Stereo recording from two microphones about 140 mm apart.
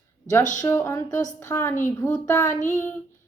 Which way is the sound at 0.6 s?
20° left (ahead or behind).